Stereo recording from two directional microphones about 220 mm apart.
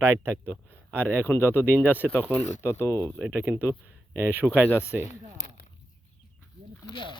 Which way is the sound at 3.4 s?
10° right (ahead or behind).